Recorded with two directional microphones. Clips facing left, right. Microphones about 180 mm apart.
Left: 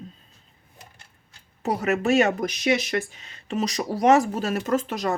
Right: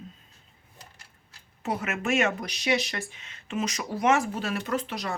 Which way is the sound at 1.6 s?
40° left (ahead or behind).